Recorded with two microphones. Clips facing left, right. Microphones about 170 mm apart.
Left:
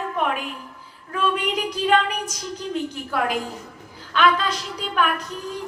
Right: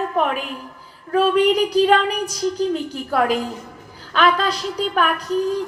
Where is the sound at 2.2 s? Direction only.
35° right (ahead or behind).